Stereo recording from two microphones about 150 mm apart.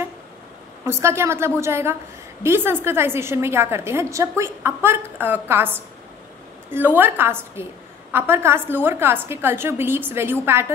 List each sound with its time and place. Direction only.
0.8 s a woman's voice: 15° right (ahead or behind)
7.0 s a woman's voice: 15° right (ahead or behind)